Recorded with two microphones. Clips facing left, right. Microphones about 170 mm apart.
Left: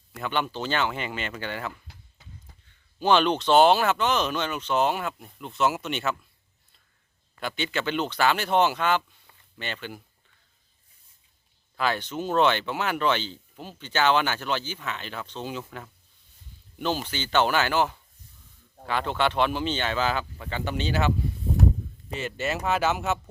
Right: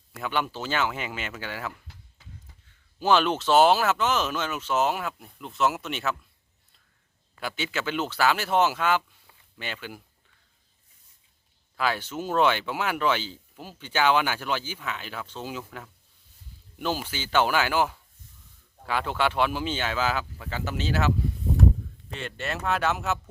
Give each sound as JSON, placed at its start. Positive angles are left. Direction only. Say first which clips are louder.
{"t": 0.2, "sound": "speech", "louder": "left 1 dB", "side_deg": -5}
{"t": 3.0, "sound": "speech", "louder": "left 1 dB", "side_deg": -5}
{"t": 7.3, "sound": "speech", "louder": "left 2 dB", "side_deg": -5}
{"t": 11.8, "sound": "speech", "louder": "left 1 dB", "side_deg": -5}
{"t": 22.1, "sound": "speech", "louder": "left 4 dB", "side_deg": 5}